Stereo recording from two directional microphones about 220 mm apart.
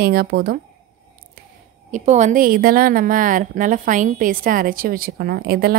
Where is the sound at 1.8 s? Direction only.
35° right (ahead or behind).